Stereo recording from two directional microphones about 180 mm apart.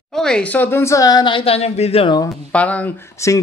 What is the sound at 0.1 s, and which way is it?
Speech, 5° left (ahead or behind).